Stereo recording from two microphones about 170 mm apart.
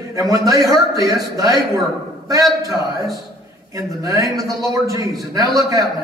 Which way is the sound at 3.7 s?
20° right (ahead or behind).